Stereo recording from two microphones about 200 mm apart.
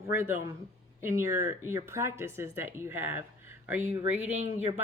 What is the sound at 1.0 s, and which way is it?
Speech, 15° right (ahead or behind).